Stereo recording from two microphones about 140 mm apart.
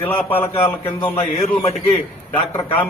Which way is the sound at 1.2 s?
45° left (ahead or behind).